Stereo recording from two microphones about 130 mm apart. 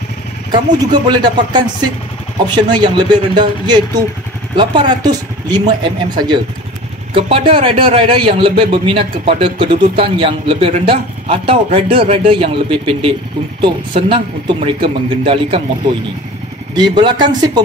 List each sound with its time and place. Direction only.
0.5 s speech: 35° right (ahead or behind)
7.2 s a man's voice: 50° right (ahead or behind)
16.7 s speech: 35° right (ahead or behind)